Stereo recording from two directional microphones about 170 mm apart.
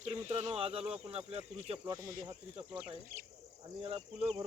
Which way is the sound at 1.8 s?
20° right (ahead or behind).